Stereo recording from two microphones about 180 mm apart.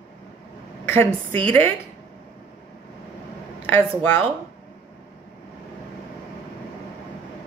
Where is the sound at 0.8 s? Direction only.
10° left (ahead or behind).